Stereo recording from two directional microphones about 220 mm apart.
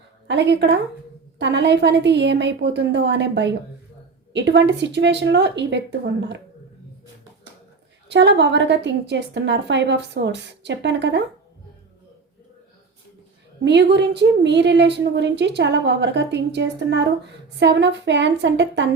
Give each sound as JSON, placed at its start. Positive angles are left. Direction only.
{"t": 0.3, "sound": "a woman's voice", "side_deg": -55}
{"t": 8.0, "sound": "a woman's voice", "side_deg": -50}
{"t": 13.7, "sound": "a woman's voice", "side_deg": -50}